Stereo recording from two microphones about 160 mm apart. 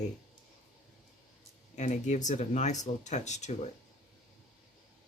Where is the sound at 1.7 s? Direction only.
50° left (ahead or behind).